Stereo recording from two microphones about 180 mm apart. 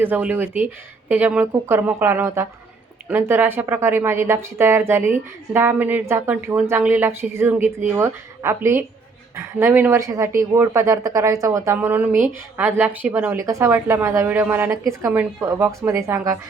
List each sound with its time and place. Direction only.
0.0 s a woman's voice: 10° right (ahead or behind)